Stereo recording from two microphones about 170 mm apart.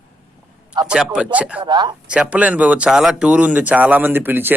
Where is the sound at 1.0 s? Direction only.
10° right (ahead or behind).